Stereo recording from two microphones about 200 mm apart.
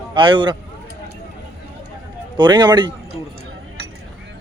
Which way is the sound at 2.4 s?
20° right (ahead or behind).